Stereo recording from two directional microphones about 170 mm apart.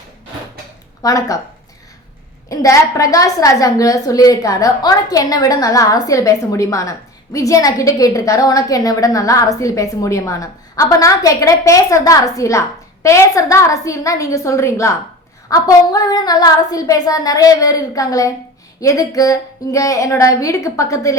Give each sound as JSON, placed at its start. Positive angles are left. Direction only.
{"t": 1.0, "sound": "a woman's voice", "side_deg": 20}
{"t": 2.5, "sound": "a woman's voice", "side_deg": 20}